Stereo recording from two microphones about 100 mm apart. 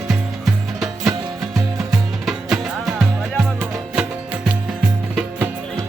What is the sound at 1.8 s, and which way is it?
Music, 5° right (ahead or behind).